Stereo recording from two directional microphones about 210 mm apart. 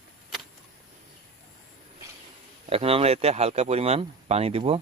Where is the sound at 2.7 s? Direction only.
25° right (ahead or behind).